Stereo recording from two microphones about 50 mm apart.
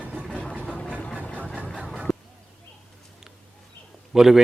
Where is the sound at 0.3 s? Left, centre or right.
Centre.